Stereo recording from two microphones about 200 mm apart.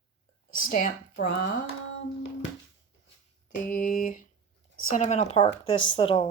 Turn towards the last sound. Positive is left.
turn(degrees=25)  # may be behind; listen again after turning